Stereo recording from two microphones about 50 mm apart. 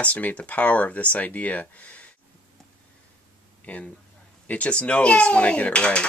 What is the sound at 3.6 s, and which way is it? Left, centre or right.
Speech, left.